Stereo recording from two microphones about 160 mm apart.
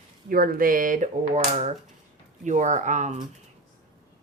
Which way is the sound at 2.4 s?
50° right (ahead or behind).